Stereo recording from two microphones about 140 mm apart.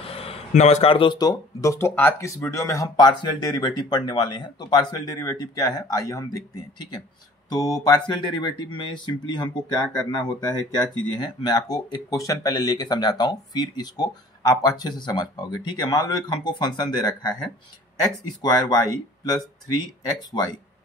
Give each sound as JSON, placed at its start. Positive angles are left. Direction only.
{"t": 0.0, "sound": "speech", "side_deg": 45}